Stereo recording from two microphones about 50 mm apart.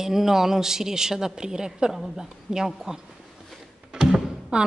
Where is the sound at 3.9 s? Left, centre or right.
Centre.